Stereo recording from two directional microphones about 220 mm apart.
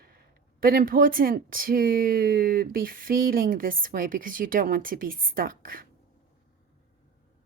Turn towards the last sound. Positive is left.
turn(degrees=-40)  # may be behind; listen again after turning